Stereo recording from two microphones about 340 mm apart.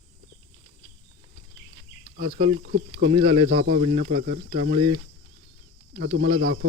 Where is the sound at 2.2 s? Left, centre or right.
Right.